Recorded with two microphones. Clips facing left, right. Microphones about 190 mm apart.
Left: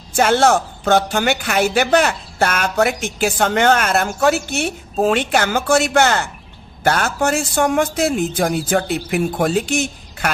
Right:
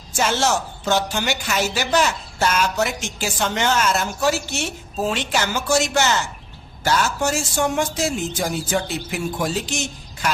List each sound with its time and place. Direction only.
0.1 s a woman's voice: 55° left (ahead or behind)